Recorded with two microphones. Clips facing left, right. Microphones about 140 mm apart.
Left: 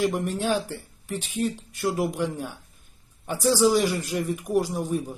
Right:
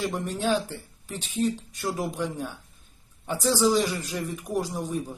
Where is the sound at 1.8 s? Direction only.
15° left (ahead or behind).